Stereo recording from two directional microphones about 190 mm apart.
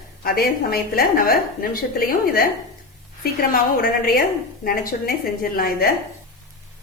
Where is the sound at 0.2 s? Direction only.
50° left (ahead or behind).